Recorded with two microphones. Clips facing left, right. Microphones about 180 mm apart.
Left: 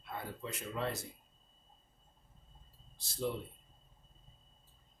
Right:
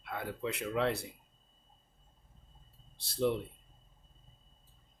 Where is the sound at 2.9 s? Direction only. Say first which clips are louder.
Right 6 dB; 60° right (ahead or behind).